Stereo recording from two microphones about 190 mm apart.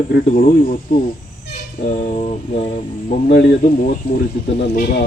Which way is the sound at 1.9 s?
40° left (ahead or behind).